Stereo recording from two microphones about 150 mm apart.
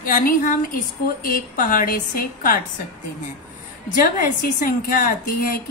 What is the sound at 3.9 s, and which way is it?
A woman's voice, 70° left (ahead or behind).